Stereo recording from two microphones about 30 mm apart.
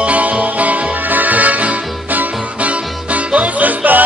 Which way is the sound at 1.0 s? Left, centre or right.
Right.